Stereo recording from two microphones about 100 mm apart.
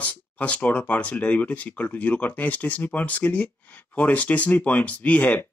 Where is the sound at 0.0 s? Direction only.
15° left (ahead or behind).